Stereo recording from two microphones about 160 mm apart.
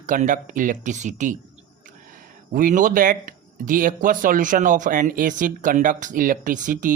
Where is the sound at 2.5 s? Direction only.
60° right (ahead or behind).